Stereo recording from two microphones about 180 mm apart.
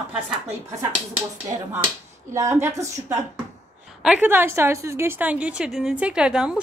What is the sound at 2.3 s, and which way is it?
A woman's voice, 15° right (ahead or behind).